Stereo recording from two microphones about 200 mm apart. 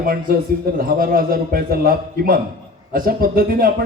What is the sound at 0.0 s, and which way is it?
A man's voice, 45° right (ahead or behind).